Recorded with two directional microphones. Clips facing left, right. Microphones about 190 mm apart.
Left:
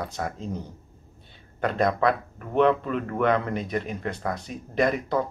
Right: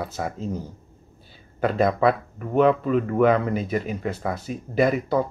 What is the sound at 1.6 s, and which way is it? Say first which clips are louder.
Speech: right 3 dB; 5° right (ahead or behind).